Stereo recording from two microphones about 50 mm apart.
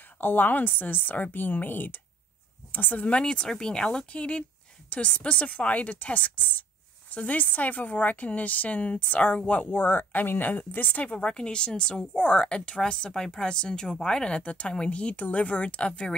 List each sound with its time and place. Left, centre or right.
0.2 s a woman's voice: left
9.7 s a woman's voice: left
11.1 s speech: centre